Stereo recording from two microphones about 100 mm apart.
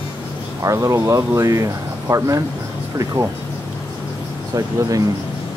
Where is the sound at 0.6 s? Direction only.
35° right (ahead or behind).